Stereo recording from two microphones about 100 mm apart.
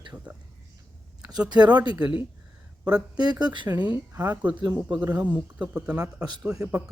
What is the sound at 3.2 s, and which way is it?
Speech, 45° right (ahead or behind).